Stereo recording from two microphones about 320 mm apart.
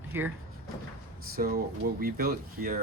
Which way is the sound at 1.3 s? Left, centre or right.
Right.